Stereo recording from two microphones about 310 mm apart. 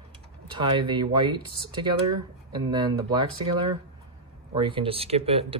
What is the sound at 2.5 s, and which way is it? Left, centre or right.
Speech, centre.